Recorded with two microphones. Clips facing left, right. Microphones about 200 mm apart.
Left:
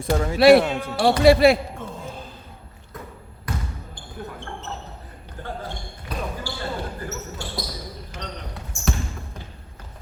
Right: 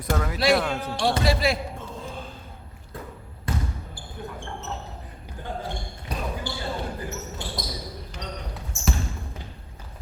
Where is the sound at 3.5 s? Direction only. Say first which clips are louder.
Right 2 dB; 25° right (ahead or behind).